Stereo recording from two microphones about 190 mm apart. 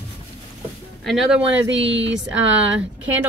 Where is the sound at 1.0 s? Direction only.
Centre (ahead or behind).